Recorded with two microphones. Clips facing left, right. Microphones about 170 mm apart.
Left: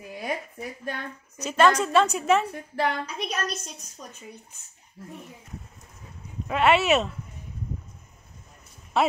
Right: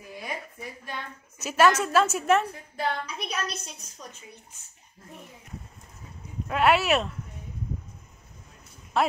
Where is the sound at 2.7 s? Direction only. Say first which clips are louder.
Left 4 dB; 70° left (ahead or behind).